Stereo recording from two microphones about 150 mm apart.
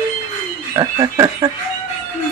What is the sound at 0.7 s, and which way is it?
Speech, 25° right (ahead or behind).